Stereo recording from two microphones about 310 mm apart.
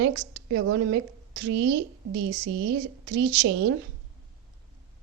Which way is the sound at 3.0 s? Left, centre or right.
Right.